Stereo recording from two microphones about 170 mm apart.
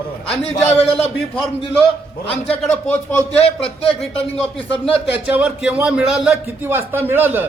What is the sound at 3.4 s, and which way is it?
Speech, 35° left (ahead or behind).